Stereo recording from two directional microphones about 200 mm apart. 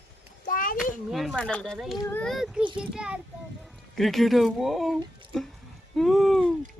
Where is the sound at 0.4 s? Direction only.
45° left (ahead or behind).